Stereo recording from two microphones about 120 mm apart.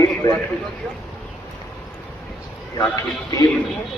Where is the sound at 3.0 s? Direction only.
30° left (ahead or behind).